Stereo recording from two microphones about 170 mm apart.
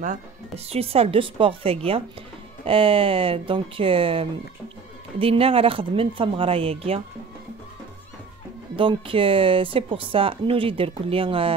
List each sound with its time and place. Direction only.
0.7 s a woman's voice: 35° right (ahead or behind)
8.7 s a woman's voice: 30° right (ahead or behind)